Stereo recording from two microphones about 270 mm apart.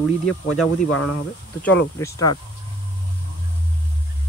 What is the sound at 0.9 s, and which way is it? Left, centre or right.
Speech, left.